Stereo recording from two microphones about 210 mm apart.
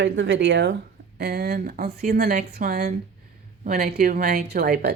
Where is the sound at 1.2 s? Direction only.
45° right (ahead or behind).